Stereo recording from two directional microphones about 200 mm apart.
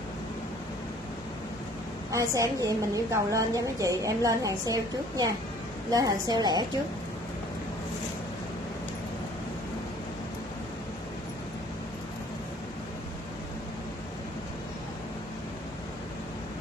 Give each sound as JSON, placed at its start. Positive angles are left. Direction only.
{"t": 2.1, "sound": "a woman's voice", "side_deg": -15}